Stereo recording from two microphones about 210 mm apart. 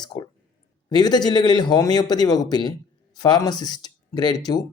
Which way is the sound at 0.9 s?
20° left (ahead or behind).